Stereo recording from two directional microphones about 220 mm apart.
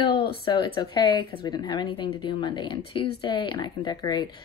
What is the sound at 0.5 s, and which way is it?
A woman's voice, 20° left (ahead or behind).